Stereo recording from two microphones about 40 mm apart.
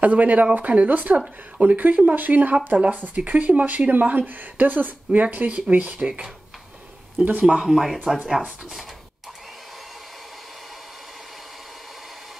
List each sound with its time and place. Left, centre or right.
0.0 s a woman's voice: right
7.2 s speech: right
7.6 s speech: centre